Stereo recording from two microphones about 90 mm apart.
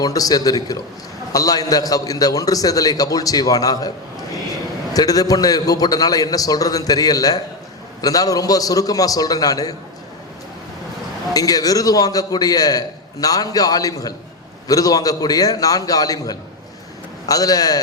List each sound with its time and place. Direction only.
0.0 s a man's voice: 45° left (ahead or behind)
11.3 s a man's voice: 45° left (ahead or behind)